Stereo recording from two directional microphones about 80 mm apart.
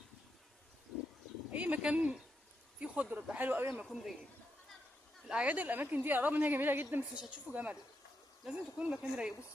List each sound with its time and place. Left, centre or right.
1.5 s speech: centre
3.8 s speech: centre
5.3 s a woman's voice: centre
7.2 s speech: centre